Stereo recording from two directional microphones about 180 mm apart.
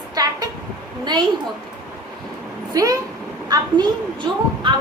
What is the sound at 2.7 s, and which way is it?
A woman's voice, 20° right (ahead or behind).